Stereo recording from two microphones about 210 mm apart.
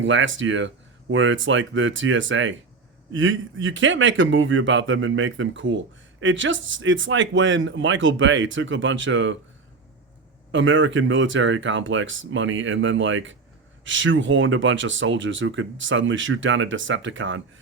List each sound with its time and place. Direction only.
0.0 s a man's voice: 65° right (ahead or behind)
10.5 s a man's voice: 65° right (ahead or behind)